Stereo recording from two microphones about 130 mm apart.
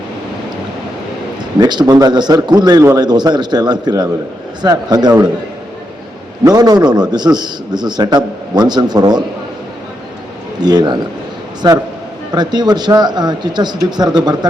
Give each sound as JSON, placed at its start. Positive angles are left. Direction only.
{"t": 1.5, "sound": "a man's voice", "side_deg": -30}
{"t": 6.4, "sound": "a man's voice", "side_deg": -30}
{"t": 10.6, "sound": "a man's voice", "side_deg": -30}